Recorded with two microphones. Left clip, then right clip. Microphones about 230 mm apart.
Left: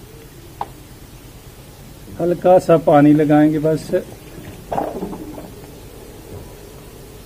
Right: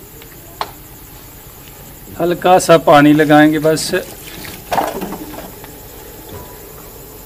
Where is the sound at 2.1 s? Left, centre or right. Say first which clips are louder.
Right 2 dB; left.